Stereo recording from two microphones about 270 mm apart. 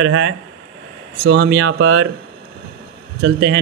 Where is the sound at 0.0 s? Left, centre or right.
Right.